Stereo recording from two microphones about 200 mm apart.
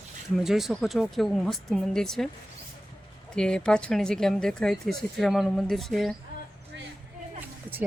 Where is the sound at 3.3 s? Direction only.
5° left (ahead or behind).